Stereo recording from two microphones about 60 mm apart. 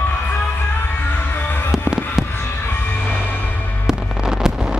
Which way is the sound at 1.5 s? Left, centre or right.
Left.